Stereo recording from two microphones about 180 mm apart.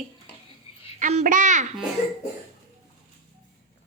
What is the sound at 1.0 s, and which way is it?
Speech, 45° right (ahead or behind).